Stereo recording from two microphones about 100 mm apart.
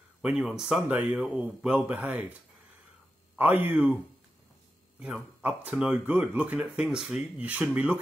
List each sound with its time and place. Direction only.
0.2 s speech: 10° right (ahead or behind)
0.7 s speech: 15° right (ahead or behind)
3.3 s speech: 20° right (ahead or behind)
5.0 s speech: 10° right (ahead or behind)